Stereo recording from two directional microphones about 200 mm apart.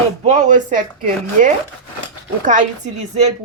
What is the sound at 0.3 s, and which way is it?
Speech, 35° right (ahead or behind).